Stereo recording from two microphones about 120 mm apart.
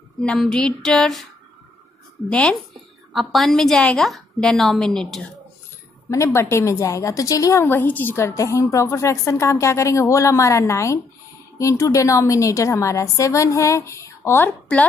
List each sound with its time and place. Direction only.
0.2 s a woman's voice: 5° left (ahead or behind)
2.2 s a woman's voice: 10° left (ahead or behind)
6.0 s a woman's voice: 25° left (ahead or behind)